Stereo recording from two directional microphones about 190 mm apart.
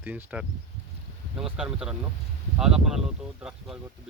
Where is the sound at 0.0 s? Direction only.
10° right (ahead or behind).